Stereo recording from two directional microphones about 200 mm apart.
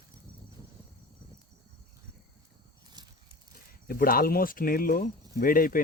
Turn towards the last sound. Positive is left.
turn(degrees=45)  # may be behind; listen again after turning